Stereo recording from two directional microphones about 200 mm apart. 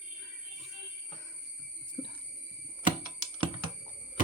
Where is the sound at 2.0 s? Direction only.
35° left (ahead or behind).